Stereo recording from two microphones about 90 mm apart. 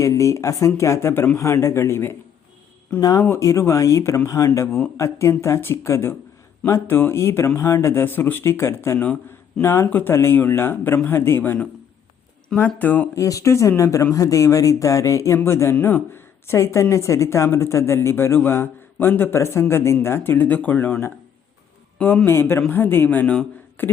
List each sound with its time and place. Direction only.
0.0 s speech: 35° left (ahead or behind)
3.0 s speech: 40° left (ahead or behind); by 13.1 s 20° left (ahead or behind)
13.1 s speech: 35° left (ahead or behind); by 23.5 s 10° left (ahead or behind)
23.8 s a sound: 20° left (ahead or behind)